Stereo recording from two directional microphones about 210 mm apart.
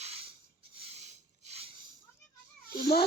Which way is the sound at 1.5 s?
30° right (ahead or behind).